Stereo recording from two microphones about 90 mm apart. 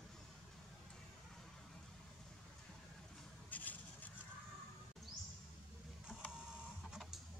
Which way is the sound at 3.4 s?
20° left (ahead or behind).